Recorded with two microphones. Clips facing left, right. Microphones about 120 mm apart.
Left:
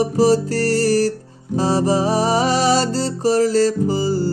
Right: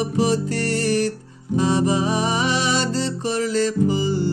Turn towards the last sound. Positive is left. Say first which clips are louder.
# left 1 dB
turn(degrees=40)  # may be behind; listen again after turning